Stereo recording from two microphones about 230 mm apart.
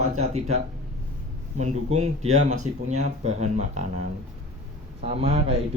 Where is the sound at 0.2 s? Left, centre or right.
Right.